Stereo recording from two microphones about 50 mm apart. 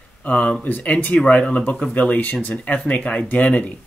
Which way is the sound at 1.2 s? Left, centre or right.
Centre.